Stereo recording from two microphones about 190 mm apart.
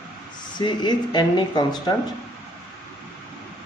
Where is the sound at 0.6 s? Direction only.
25° left (ahead or behind).